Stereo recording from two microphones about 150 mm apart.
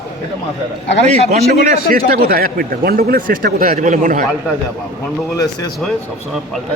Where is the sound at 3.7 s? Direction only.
55° right (ahead or behind).